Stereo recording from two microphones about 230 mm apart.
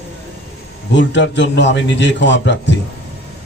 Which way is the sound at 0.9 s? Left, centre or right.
Left.